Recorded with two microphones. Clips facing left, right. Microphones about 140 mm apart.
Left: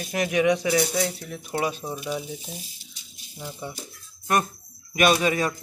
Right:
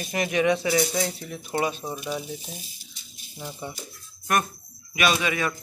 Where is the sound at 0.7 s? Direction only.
Centre (ahead or behind).